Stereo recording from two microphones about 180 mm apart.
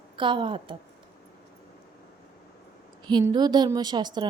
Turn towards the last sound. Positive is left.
turn(degrees=-25)  # may be behind; listen again after turning